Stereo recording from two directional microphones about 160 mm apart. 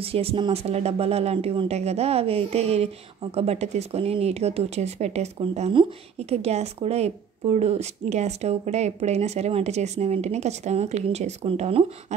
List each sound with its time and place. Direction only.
0.0 s speech: 35° right (ahead or behind)